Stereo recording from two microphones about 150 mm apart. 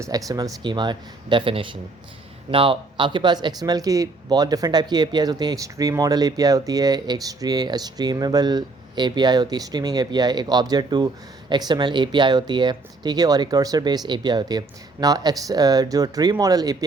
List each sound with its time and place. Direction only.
0.0 s speech: 25° right (ahead or behind)